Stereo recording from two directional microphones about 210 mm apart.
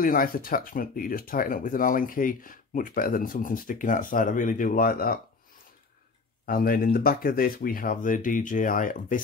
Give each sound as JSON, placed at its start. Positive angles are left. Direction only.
{"t": 0.0, "sound": "speech", "side_deg": 40}
{"t": 6.4, "sound": "speech", "side_deg": 45}